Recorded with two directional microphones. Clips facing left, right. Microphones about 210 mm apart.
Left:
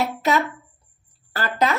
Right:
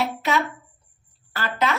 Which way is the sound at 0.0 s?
40° left (ahead or behind).